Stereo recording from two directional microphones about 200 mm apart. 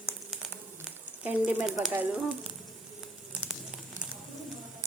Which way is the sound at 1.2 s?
10° right (ahead or behind).